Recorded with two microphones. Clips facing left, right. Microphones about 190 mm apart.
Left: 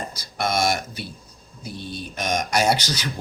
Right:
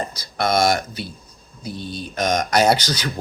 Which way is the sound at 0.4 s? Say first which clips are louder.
Right 4 dB; 35° right (ahead or behind).